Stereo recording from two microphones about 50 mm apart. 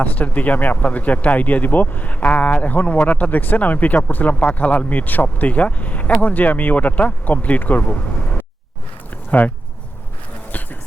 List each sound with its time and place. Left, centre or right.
0.0 s speech: left